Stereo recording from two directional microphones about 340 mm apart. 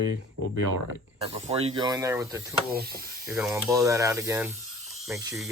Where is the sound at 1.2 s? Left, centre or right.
Centre.